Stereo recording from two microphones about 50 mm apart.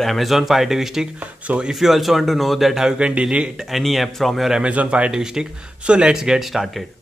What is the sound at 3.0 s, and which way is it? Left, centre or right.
Speech, right.